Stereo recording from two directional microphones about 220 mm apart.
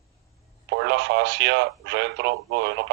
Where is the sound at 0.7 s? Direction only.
50° right (ahead or behind).